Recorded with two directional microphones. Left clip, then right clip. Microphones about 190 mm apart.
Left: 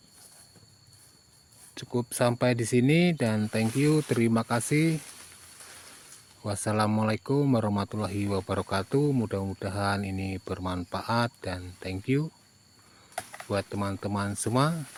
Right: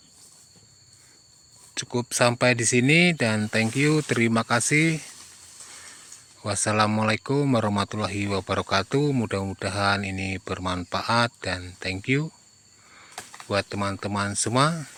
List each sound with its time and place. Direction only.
1.7 s speech: 5° right (ahead or behind)
6.4 s speech: 5° right (ahead or behind)
13.5 s speech: 5° right (ahead or behind)